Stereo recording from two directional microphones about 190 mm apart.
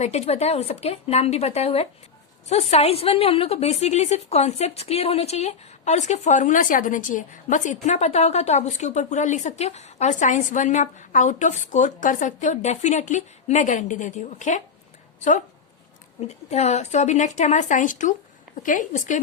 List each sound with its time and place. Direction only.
0.0 s a woman's voice: 35° left (ahead or behind)
16.2 s a woman's voice: 35° left (ahead or behind)